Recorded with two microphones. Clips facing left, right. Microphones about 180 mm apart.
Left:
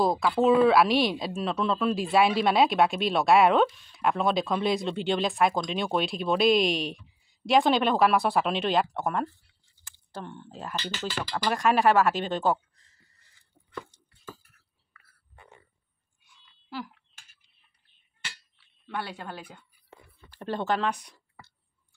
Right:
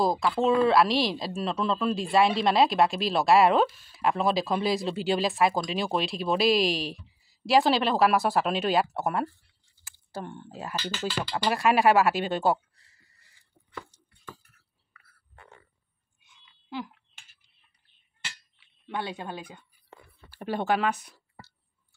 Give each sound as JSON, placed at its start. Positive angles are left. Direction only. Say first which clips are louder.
{"t": 0.0, "sound": "speech", "louder": "left 1 dB", "side_deg": 0}
{"t": 16.3, "sound": "a sound", "louder": "right 2 dB", "side_deg": -20}
{"t": 18.9, "sound": "speech", "louder": "right 2 dB", "side_deg": -15}